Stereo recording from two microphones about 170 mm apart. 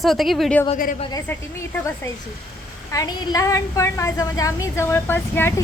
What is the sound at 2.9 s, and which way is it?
A woman's voice, 20° left (ahead or behind).